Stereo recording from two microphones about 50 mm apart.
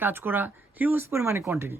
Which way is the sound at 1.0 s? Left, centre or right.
Right.